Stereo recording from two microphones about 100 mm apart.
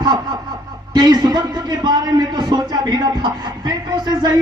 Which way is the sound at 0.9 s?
45° right (ahead or behind).